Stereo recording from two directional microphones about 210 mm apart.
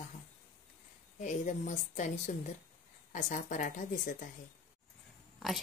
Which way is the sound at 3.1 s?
40° left (ahead or behind).